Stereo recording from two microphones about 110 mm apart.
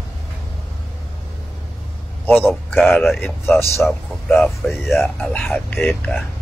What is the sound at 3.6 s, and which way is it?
Speech, 25° left (ahead or behind).